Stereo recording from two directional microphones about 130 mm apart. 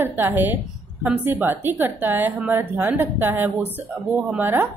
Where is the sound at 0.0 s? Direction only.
15° right (ahead or behind).